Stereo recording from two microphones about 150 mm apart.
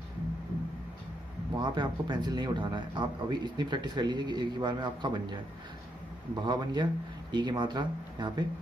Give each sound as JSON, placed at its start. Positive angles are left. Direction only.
{"t": 1.6, "sound": "speech", "side_deg": -30}
{"t": 6.4, "sound": "speech", "side_deg": -30}